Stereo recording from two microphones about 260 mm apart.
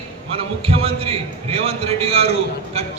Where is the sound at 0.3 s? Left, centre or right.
Right.